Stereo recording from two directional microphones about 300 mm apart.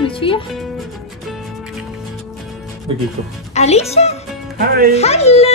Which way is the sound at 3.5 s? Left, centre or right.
Left.